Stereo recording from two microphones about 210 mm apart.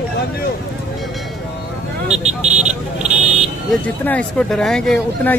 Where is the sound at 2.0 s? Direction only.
35° right (ahead or behind).